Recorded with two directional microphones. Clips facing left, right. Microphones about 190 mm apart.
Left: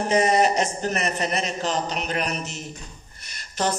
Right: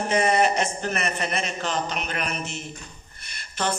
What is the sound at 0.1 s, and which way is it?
A man's voice, 35° left (ahead or behind).